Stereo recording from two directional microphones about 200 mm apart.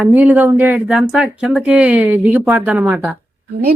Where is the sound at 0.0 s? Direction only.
10° right (ahead or behind).